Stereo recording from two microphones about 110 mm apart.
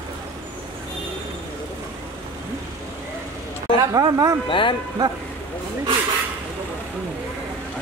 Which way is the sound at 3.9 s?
30° right (ahead or behind).